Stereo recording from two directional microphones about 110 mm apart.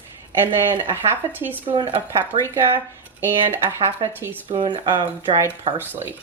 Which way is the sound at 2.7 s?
20° right (ahead or behind).